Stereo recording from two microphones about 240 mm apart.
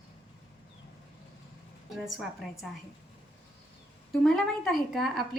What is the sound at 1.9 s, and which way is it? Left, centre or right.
Speech, centre.